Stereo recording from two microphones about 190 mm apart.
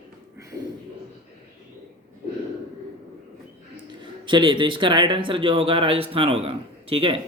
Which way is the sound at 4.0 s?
25° right (ahead or behind).